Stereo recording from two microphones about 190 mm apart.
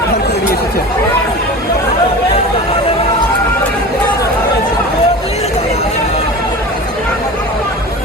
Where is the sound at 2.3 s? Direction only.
30° left (ahead or behind).